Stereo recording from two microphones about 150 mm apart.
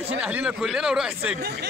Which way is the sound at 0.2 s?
10° right (ahead or behind).